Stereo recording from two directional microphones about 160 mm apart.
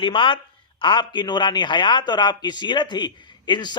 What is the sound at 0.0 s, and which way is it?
A man's voice, 30° left (ahead or behind).